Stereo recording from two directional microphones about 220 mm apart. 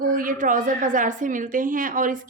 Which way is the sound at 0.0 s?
40° right (ahead or behind).